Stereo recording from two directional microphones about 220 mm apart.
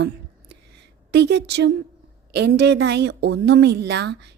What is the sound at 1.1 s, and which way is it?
A woman's voice, 50° right (ahead or behind).